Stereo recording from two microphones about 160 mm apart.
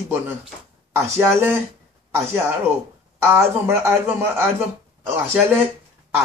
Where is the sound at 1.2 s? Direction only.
15° right (ahead or behind).